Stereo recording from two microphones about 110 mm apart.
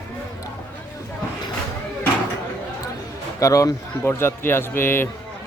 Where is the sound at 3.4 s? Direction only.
30° left (ahead or behind).